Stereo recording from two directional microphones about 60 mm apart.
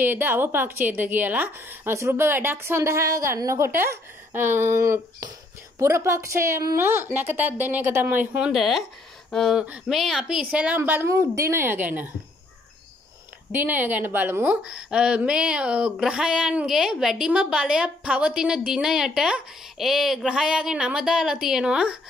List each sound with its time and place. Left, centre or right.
0.0 s a woman's voice: right
4.7 s a woman's voice: right
8.4 s speech: centre
9.3 s speech: centre
9.8 s speech: centre
10.1 s a woman's voice: centre
10.4 s a woman's voice: right
11.1 s a woman's voice: right
11.5 s a woman's voice: right
13.5 s a woman's voice: right
14.6 s a woman's voice: centre